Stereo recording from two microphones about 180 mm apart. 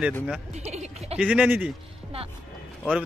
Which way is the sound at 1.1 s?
5° right (ahead or behind).